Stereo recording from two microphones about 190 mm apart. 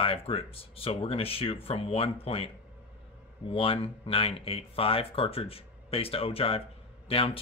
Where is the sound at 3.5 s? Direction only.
30° left (ahead or behind).